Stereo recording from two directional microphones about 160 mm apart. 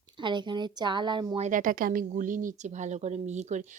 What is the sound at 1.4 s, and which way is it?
Speech, 55° right (ahead or behind).